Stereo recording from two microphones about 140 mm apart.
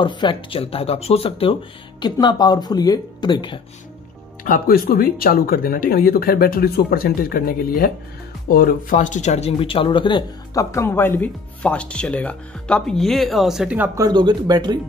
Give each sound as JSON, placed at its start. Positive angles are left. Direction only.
{"t": 0.0, "sound": "speech", "side_deg": 35}
{"t": 4.5, "sound": "speech", "side_deg": 90}
{"t": 14.0, "sound": "speech", "side_deg": -30}